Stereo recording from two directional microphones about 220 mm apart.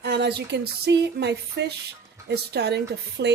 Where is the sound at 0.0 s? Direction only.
50° right (ahead or behind).